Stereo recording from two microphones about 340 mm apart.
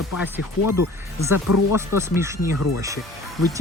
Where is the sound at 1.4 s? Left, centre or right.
Left.